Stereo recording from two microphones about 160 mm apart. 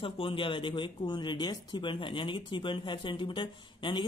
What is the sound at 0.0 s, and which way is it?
Speech, 35° left (ahead or behind).